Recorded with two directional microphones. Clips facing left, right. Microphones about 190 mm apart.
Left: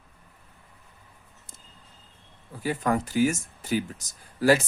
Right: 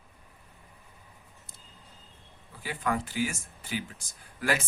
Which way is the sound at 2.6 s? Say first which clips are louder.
Left 5 dB; 45° left (ahead or behind).